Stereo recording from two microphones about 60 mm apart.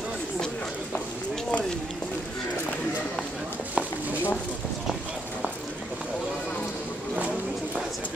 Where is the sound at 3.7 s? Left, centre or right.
Right.